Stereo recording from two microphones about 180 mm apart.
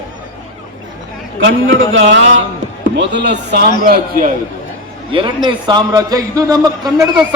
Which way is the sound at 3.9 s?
50° right (ahead or behind).